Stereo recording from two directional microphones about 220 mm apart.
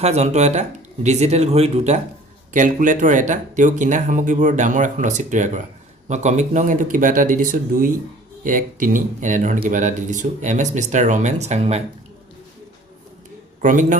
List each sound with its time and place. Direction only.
0.0 s speech: 30° right (ahead or behind)
13.6 s speech: 35° right (ahead or behind)